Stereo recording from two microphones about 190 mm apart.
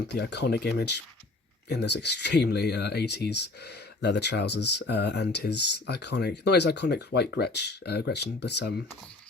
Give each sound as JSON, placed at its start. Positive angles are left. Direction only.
{"t": 0.1, "sound": "speech", "side_deg": 60}